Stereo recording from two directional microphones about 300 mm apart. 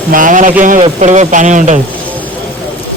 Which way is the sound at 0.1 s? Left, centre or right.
Right.